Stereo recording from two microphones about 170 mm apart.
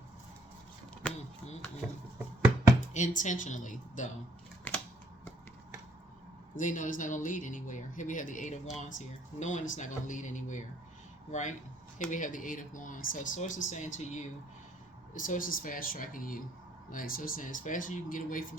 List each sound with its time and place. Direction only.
2.9 s speech: 45° left (ahead or behind)
4.7 s camera: 10° left (ahead or behind)
6.6 s speech: 50° left (ahead or behind)